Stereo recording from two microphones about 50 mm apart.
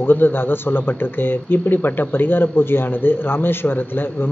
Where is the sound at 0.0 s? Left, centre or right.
Left.